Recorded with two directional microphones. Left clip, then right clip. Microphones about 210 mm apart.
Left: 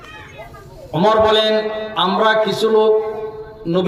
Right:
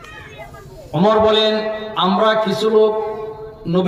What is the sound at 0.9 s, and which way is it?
A man's voice, 50° left (ahead or behind).